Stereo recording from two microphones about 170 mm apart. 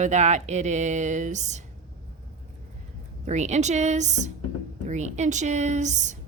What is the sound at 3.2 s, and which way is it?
A woman's voice, 45° right (ahead or behind).